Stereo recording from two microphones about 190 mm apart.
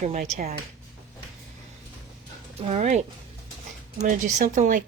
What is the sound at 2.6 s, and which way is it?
Speech, 35° right (ahead or behind).